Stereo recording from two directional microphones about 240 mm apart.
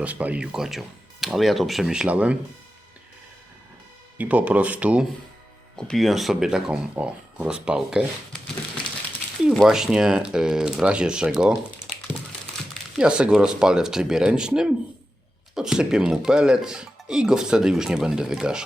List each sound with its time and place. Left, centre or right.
0.0 s speech: centre
4.2 s speech: centre
9.4 s speech: centre
13.0 s speech: centre